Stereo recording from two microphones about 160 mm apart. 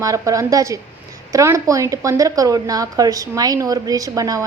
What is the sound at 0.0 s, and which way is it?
Speech, 20° right (ahead or behind).